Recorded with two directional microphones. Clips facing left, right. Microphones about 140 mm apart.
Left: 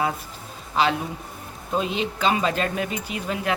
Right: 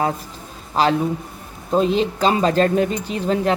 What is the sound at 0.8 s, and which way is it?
Speech, 40° right (ahead or behind).